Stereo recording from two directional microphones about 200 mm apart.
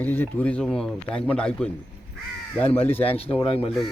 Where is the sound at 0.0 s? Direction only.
10° left (ahead or behind).